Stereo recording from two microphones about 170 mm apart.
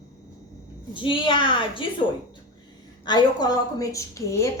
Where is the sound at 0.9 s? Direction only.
30° left (ahead or behind).